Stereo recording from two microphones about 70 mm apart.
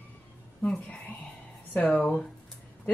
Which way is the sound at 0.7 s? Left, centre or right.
Left.